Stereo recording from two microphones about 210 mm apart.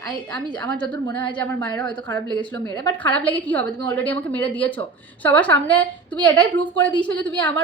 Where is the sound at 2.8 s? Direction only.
10° left (ahead or behind).